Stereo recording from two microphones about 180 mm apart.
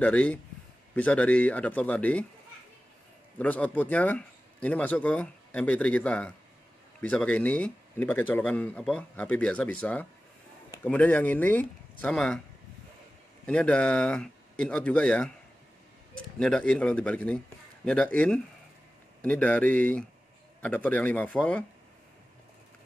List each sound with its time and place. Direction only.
0.0 s speech: 10° left (ahead or behind)
3.3 s speech: 10° left (ahead or behind)
13.5 s speech: 5° left (ahead or behind)
16.3 s speech: 5° left (ahead or behind)